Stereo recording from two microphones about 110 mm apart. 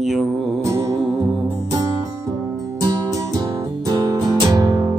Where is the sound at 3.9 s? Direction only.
35° right (ahead or behind).